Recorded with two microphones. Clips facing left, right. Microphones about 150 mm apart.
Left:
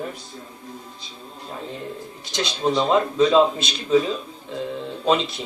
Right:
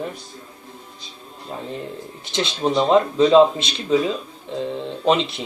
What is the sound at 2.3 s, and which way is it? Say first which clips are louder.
Speech: right 2 dB; 25° right (ahead or behind).